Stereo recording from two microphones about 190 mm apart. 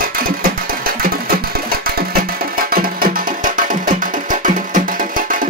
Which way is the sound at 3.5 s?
45° right (ahead or behind).